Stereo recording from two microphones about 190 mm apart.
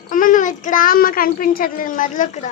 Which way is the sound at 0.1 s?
45° left (ahead or behind).